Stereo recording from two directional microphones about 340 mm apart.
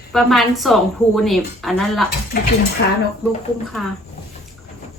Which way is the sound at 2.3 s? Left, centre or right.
Left.